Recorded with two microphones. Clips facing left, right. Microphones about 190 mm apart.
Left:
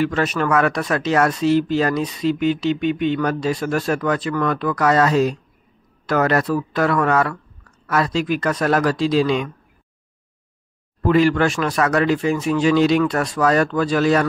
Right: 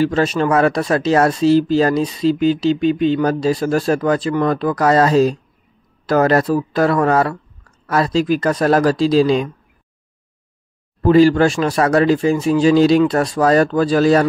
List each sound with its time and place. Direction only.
0.0 s speech: 30° right (ahead or behind)
11.1 s speech: 30° right (ahead or behind)